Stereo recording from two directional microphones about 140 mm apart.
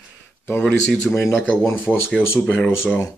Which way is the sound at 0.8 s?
5° left (ahead or behind).